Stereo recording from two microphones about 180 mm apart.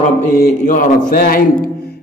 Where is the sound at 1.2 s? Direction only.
60° left (ahead or behind).